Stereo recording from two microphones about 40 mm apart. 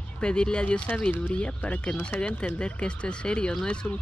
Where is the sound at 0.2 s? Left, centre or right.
Left.